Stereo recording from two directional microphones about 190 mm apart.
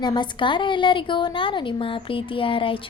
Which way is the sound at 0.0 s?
25° left (ahead or behind).